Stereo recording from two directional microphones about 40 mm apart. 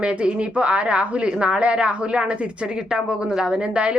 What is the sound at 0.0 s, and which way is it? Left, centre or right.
A woman's voice, right.